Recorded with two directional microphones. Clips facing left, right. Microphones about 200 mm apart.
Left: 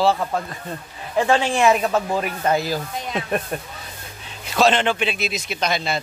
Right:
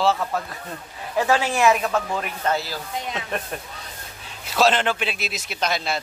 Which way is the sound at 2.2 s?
15° left (ahead or behind).